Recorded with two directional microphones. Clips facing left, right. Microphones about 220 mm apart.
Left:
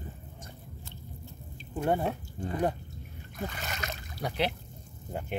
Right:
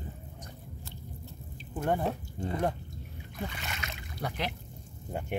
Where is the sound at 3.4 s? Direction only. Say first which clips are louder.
Left 3 dB; 40° left (ahead or behind).